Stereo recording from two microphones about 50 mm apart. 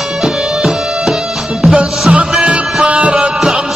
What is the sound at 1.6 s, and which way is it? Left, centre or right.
Music, centre.